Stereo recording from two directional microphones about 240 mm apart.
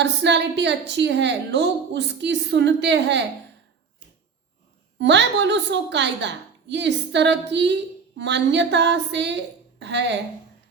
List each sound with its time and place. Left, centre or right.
0.0 s a woman's voice: right
4.9 s a woman's voice: right